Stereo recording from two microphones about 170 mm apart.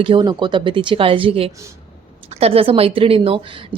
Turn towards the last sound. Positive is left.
turn(degrees=-30)  # may be behind; listen again after turning